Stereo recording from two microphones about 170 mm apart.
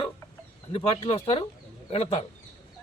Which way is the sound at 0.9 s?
35° left (ahead or behind).